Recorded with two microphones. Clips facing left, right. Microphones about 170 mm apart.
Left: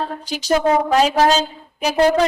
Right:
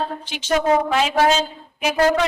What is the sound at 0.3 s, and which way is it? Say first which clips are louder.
A woman's voice: left 2 dB; 40° left (ahead or behind).